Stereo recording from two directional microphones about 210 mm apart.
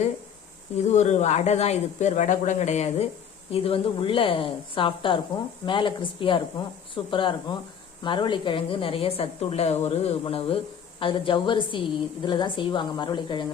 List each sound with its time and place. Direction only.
0.8 s a woman's voice: 30° left (ahead or behind)